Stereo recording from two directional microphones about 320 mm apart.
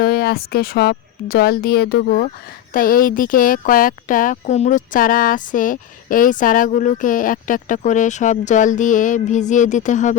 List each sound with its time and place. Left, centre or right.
0.0 s speech: left